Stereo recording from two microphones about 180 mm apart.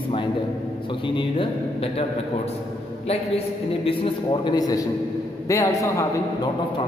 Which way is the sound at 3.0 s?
30° left (ahead or behind).